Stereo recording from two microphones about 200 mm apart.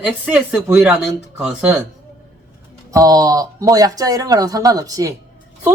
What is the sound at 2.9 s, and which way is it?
Speech, 20° right (ahead or behind).